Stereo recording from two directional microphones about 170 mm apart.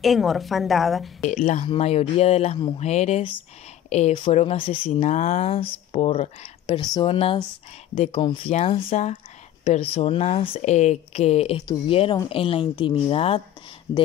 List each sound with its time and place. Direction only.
0.0 s a woman's voice: centre (ahead or behind)
1.2 s speech: 45° left (ahead or behind)
6.8 s speech: 25° left (ahead or behind)